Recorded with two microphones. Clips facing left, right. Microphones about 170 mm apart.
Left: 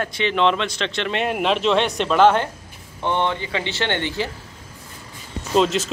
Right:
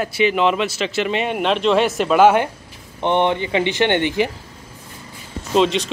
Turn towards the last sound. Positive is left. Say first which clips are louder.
# right 2 dB
turn(degrees=0)  # may be behind; listen again after turning